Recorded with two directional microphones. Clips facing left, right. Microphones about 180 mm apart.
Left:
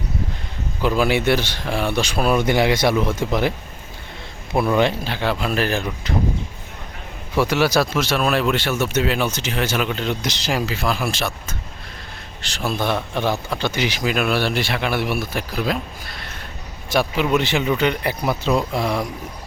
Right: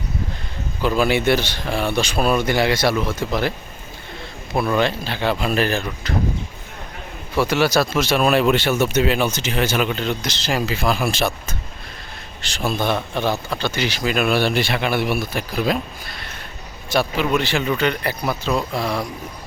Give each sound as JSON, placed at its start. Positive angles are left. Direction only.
{"t": 0.8, "sound": "speech", "side_deg": 10}
{"t": 4.5, "sound": "speech", "side_deg": 15}
{"t": 7.3, "sound": "speech", "side_deg": 10}
{"t": 8.0, "sound": "speech", "side_deg": -5}
{"t": 10.2, "sound": "speech", "side_deg": 20}
{"t": 10.5, "sound": "speech", "side_deg": -5}
{"t": 12.4, "sound": "speech", "side_deg": 0}
{"t": 14.0, "sound": "speech", "side_deg": 5}
{"t": 16.9, "sound": "speech", "side_deg": 15}